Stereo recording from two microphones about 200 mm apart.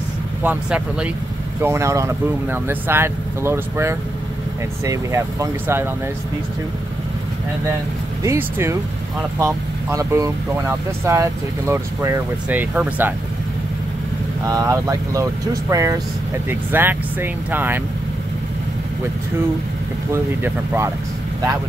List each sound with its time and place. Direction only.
0.4 s speech: 10° right (ahead or behind)
8.2 s speech: 15° right (ahead or behind)
14.4 s speech: 15° right (ahead or behind)
20.1 s speech: 10° right (ahead or behind)